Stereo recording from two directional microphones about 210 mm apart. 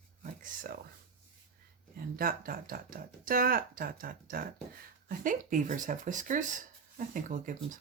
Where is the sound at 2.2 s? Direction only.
45° right (ahead or behind).